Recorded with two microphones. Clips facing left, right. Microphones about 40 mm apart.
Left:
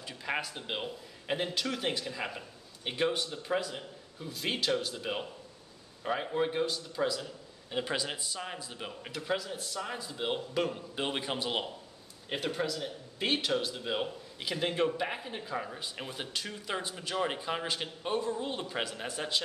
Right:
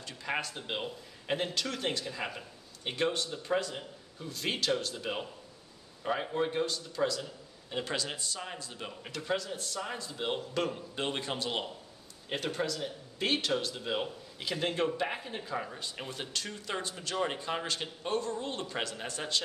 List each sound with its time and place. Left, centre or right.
0.0 s speech: centre